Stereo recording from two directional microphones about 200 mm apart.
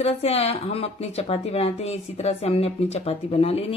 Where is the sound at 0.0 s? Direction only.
30° left (ahead or behind).